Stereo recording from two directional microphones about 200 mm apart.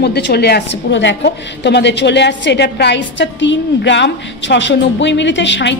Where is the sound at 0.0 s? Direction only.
55° left (ahead or behind).